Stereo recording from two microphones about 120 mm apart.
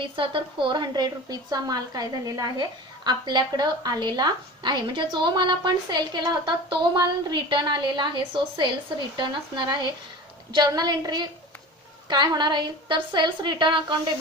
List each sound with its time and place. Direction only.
0.0 s a woman's voice: 45° right (ahead or behind)